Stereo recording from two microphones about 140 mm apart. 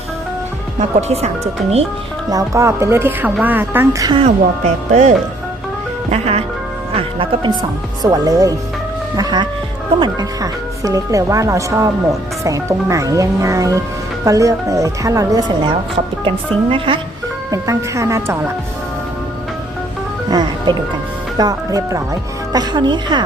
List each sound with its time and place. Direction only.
0.8 s speech: 50° right (ahead or behind)
2.3 s speech: 20° right (ahead or behind)
4.0 s a woman's voice: 35° right (ahead or behind)
4.9 s a woman's voice: 60° right (ahead or behind); by 7.5 s 40° right (ahead or behind)
8.0 s a woman's voice: 25° right (ahead or behind)
17.5 s speech: 20° right (ahead or behind)
20.3 s music: 30° right (ahead or behind)
21.3 s a woman's voice: 25° right (ahead or behind)